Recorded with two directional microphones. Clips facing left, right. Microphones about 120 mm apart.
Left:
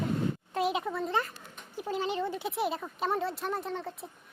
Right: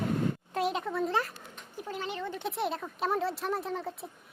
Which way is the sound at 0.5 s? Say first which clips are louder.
Left 1 dB; 5° left (ahead or behind).